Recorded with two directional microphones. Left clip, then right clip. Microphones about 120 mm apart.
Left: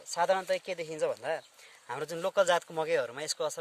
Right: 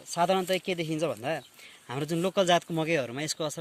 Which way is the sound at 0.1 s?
30° left (ahead or behind).